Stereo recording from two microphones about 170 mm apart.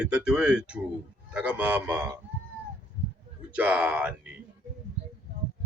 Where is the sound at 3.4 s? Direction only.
10° right (ahead or behind).